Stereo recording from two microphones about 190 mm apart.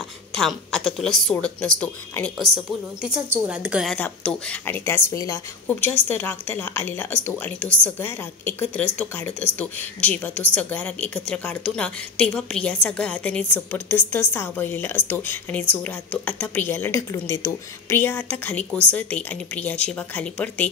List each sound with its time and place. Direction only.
0.3 s a woman's voice: centre (ahead or behind)